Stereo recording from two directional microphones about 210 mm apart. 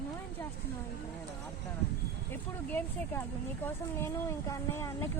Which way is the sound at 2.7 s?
10° left (ahead or behind).